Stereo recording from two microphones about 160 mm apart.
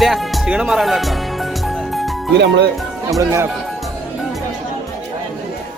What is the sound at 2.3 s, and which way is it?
Speech, 90° right.